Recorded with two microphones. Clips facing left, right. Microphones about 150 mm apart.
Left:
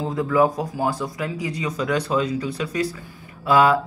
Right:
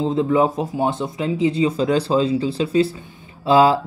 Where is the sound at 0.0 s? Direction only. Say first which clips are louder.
Right 2 dB; 25° right (ahead or behind).